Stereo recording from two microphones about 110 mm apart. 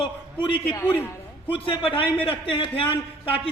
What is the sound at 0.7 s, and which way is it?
Speech, 20° left (ahead or behind).